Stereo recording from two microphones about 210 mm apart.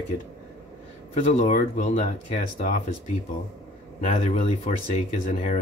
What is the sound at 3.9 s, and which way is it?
Speech, 30° left (ahead or behind).